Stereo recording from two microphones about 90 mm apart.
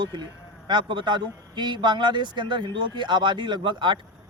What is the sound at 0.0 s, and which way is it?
Speech, 50° right (ahead or behind).